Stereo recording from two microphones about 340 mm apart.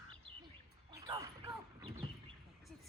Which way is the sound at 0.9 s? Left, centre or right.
Centre.